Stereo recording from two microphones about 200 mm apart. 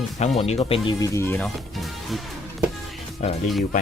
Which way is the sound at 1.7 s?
Centre (ahead or behind).